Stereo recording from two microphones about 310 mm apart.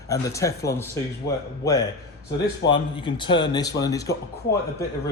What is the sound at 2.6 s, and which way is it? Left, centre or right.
Speech, left.